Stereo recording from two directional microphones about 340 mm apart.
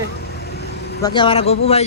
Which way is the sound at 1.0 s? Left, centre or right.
Centre.